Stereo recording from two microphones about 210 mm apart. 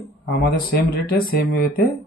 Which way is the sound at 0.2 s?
45° left (ahead or behind).